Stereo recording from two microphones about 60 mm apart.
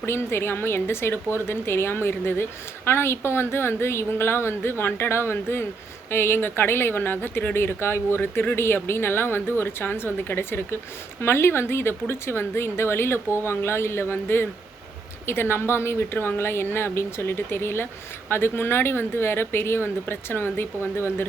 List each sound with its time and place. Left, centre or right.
0.0 s a woman's voice: left